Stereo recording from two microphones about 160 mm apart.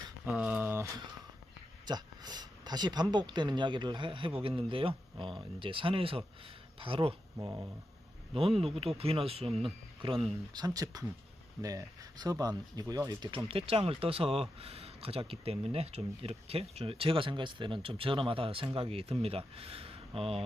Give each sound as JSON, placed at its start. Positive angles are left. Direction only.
{"t": 0.3, "sound": "a sound", "side_deg": -5}
{"t": 1.9, "sound": "speech", "side_deg": -25}
{"t": 7.3, "sound": "speech", "side_deg": -20}
{"t": 8.3, "sound": "speech", "side_deg": -35}